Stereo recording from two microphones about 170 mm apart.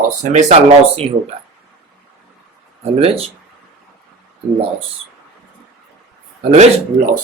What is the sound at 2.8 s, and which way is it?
Speech, 35° right (ahead or behind).